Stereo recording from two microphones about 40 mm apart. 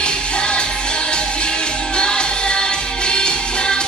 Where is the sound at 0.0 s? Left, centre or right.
Left.